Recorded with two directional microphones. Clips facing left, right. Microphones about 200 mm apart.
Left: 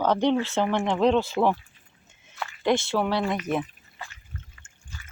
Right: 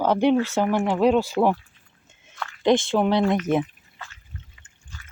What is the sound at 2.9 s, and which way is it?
Speech, 20° right (ahead or behind).